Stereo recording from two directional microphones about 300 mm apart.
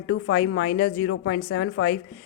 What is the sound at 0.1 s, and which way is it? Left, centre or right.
Speech, left.